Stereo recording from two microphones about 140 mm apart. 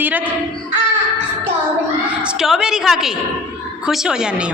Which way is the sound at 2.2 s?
5° right (ahead or behind).